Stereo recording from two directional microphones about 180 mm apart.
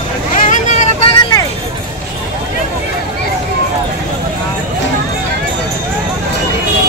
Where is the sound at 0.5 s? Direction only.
40° left (ahead or behind).